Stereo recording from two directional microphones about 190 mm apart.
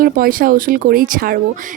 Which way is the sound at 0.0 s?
50° right (ahead or behind).